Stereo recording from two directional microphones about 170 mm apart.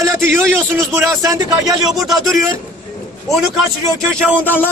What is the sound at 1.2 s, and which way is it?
Speech, 20° right (ahead or behind).